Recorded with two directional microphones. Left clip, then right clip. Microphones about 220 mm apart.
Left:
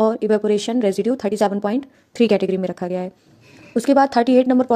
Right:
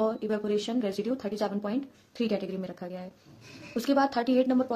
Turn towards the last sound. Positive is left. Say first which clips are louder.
# left 10 dB
turn(degrees=35)  # may be behind; listen again after turning